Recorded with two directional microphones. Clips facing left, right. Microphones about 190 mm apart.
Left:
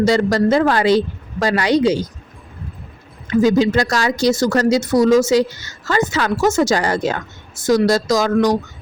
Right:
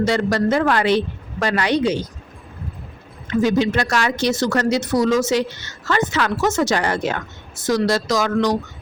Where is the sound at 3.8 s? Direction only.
35° left (ahead or behind).